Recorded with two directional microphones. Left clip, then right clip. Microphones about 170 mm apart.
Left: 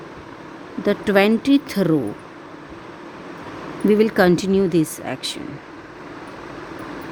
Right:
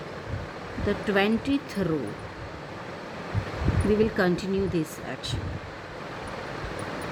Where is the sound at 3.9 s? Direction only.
65° left (ahead or behind).